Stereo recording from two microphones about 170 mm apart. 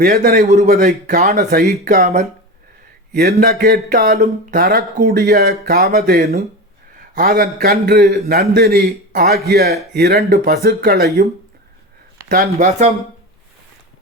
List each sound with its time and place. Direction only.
0.0 s a man's voice: 55° right (ahead or behind)
0.7 s speech: 55° right (ahead or behind)
1.9 s a man's voice: 45° right (ahead or behind)
3.1 s speech: 65° right (ahead or behind)
12.3 s a man's voice: 50° right (ahead or behind)